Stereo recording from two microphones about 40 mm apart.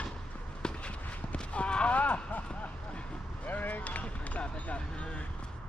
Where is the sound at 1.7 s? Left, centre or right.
Left.